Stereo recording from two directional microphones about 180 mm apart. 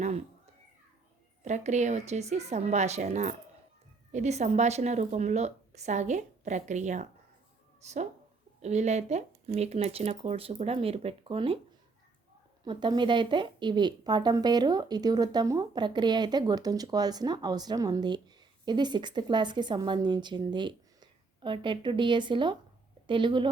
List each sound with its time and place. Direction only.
1.5 s speech: 40° right (ahead or behind)
12.6 s speech: 25° right (ahead or behind)